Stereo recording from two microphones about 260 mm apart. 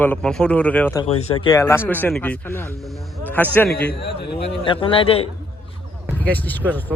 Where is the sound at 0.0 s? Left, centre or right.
Centre.